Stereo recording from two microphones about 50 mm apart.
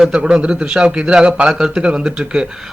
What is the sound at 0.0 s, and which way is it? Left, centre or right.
A man's voice, centre.